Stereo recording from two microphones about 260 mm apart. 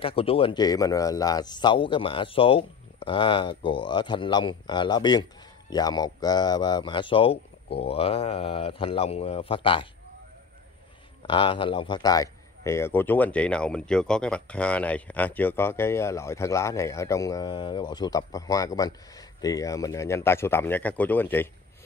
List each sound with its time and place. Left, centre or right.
0.0 s speech: left
11.2 s speech: centre